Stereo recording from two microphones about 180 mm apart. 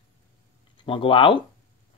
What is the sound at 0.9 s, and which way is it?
Speech, 30° left (ahead or behind).